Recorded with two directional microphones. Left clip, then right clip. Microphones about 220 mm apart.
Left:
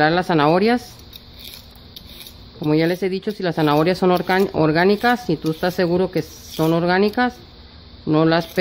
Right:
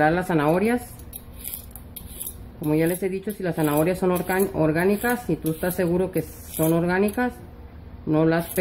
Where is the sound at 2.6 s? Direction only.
35° left (ahead or behind).